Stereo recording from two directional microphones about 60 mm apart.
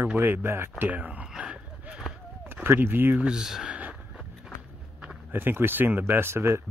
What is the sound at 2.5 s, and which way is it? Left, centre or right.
Speech, right.